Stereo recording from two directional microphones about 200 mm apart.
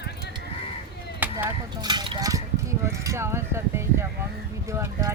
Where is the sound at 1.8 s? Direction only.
20° right (ahead or behind).